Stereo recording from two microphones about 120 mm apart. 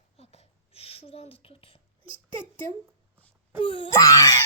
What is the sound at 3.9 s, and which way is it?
Wail, 30° left (ahead or behind).